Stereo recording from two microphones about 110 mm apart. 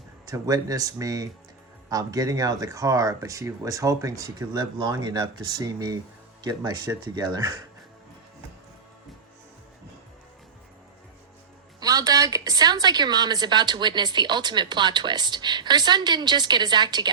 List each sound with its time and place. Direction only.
0.3 s a woman's voice: 35° right (ahead or behind)
4.5 s a woman's voice: 40° right (ahead or behind)
11.8 s a woman's voice: 35° right (ahead or behind)